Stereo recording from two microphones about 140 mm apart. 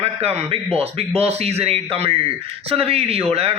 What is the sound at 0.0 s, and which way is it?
A man's voice, 45° right (ahead or behind).